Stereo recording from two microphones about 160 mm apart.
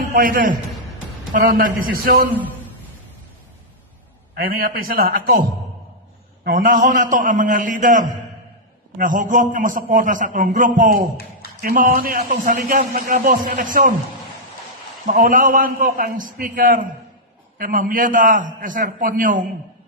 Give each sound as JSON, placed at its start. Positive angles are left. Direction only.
{"t": 0.1, "sound": "a man's voice", "side_deg": -60}
{"t": 4.4, "sound": "a man's voice", "side_deg": -70}
{"t": 6.4, "sound": "a man's voice", "side_deg": -55}
{"t": 15.0, "sound": "a man's voice", "side_deg": -55}